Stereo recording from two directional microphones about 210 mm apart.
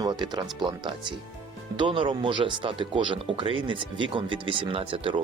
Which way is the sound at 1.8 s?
25° right (ahead or behind).